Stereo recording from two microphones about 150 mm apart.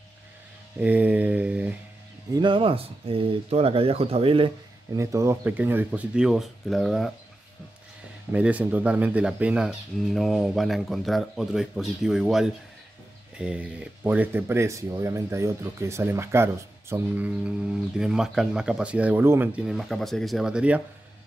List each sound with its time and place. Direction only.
0.7 s mantra: 10° right (ahead or behind)
2.3 s speech: 35° right (ahead or behind)
4.9 s speech: 20° right (ahead or behind); by 7.1 s centre (ahead or behind)
8.3 s speech: 10° right (ahead or behind)